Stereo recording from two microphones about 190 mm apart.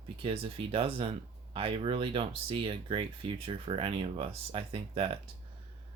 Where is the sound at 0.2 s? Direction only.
30° right (ahead or behind).